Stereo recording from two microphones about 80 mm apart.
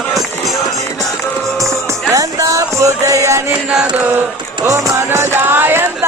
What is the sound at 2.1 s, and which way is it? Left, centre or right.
Music, right.